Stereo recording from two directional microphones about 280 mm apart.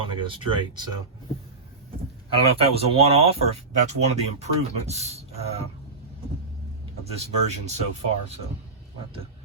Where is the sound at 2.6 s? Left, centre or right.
Right.